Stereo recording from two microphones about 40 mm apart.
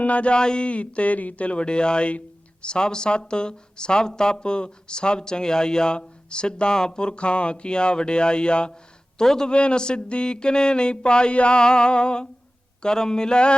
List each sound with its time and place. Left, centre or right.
0.0 s a man's voice: left; by 9.5 s centre
9.5 s speech: left